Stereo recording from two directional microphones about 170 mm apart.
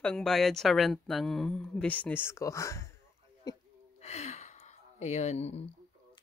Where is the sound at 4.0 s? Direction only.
40° left (ahead or behind).